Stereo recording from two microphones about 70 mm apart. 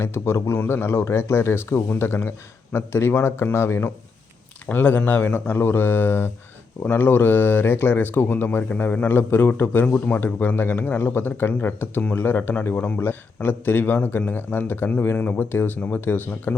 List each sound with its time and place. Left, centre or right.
0.0 s speech: left
4.6 s speech: left